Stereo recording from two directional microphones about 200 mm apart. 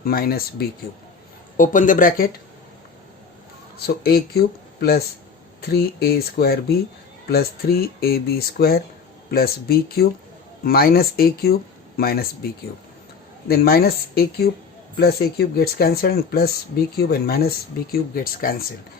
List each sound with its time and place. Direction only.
0.0 s speech: 50° left (ahead or behind)
3.8 s speech: 50° left (ahead or behind)
13.5 s speech: 50° left (ahead or behind)